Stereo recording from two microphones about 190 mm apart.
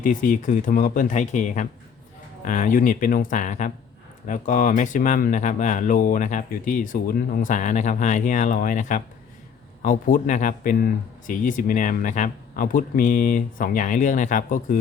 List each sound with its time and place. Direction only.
0.0 s speech: 45° left (ahead or behind)